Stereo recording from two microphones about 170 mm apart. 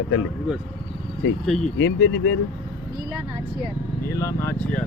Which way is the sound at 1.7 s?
90° left.